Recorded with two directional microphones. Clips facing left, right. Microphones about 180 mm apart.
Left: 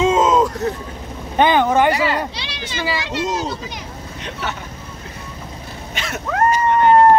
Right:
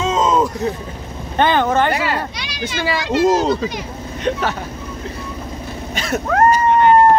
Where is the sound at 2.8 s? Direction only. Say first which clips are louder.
Right 6 dB; 55° right (ahead or behind).